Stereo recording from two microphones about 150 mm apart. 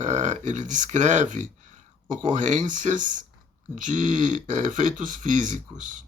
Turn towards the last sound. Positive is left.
turn(degrees=-60)  # may be behind; listen again after turning